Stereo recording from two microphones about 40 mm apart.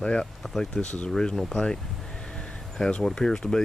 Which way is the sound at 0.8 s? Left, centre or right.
Left.